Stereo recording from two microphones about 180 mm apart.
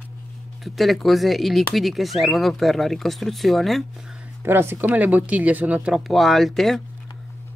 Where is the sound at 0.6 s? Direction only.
Centre (ahead or behind).